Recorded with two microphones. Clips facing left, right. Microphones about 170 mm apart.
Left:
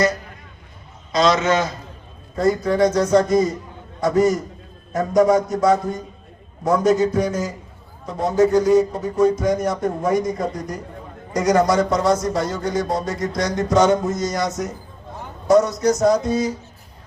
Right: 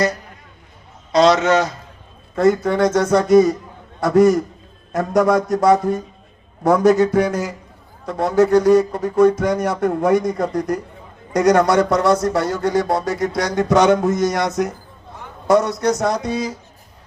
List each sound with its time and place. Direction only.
1.1 s speech: 70° right (ahead or behind)